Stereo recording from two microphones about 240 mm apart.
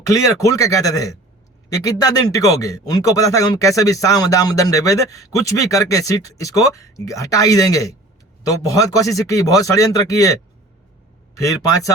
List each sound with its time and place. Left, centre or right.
0.0 s speech: centre